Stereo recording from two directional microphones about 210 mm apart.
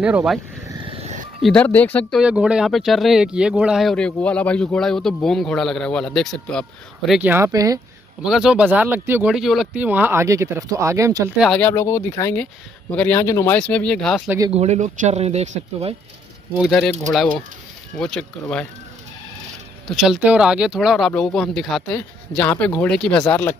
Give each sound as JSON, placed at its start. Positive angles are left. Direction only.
{"t": 0.0, "sound": "speech", "side_deg": -5}
{"t": 0.8, "sound": "music", "side_deg": -35}
{"t": 1.4, "sound": "speech", "side_deg": 5}
{"t": 7.1, "sound": "speech", "side_deg": -10}
{"t": 8.2, "sound": "speech", "side_deg": 0}
{"t": 11.5, "sound": "speech", "side_deg": 10}
{"t": 14.5, "sound": "speech", "side_deg": -30}
{"t": 16.5, "sound": "speech", "side_deg": 0}
{"t": 17.9, "sound": "speech", "side_deg": 5}
{"t": 20.0, "sound": "speech", "side_deg": -5}